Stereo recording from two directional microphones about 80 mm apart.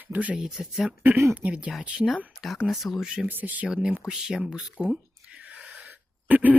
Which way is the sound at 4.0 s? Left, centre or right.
Centre.